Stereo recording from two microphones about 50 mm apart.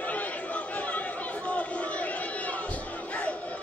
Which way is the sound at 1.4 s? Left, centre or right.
Left.